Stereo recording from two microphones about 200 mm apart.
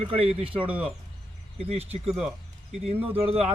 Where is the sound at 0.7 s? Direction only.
5° right (ahead or behind).